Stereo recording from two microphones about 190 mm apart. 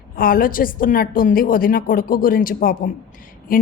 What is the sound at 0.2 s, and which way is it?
A woman's voice, 50° left (ahead or behind).